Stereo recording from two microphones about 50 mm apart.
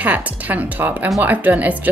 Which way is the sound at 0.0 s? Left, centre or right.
Right.